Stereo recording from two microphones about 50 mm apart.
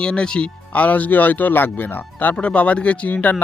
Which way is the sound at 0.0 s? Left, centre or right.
Centre.